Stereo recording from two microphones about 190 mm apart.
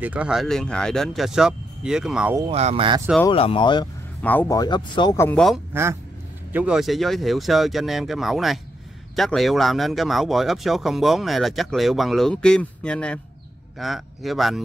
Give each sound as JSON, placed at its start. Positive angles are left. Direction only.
{"t": 0.0, "sound": "speech", "side_deg": -5}
{"t": 2.4, "sound": "speech", "side_deg": -30}
{"t": 3.3, "sound": "speech", "side_deg": 30}
{"t": 4.2, "sound": "speech", "side_deg": 10}
{"t": 4.6, "sound": "speech", "side_deg": 25}
{"t": 5.7, "sound": "speech", "side_deg": -15}